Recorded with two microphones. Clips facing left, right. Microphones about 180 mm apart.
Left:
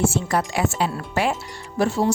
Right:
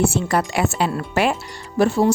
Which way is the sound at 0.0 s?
65° right (ahead or behind).